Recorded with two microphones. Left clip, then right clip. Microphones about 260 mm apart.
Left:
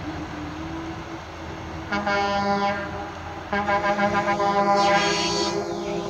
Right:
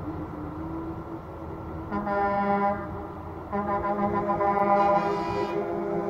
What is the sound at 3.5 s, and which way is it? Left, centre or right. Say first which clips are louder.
Music: left 5 dB; left.